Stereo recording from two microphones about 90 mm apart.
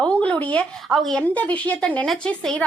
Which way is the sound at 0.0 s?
15° left (ahead or behind).